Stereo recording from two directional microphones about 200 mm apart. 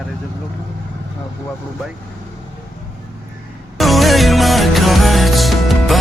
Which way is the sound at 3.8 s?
Centre (ahead or behind).